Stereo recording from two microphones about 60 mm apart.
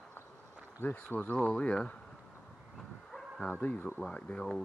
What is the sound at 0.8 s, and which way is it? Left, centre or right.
Speech, left.